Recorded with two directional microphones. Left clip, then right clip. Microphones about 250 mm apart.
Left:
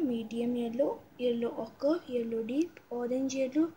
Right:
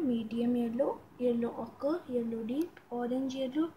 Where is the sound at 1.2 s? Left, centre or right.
Centre.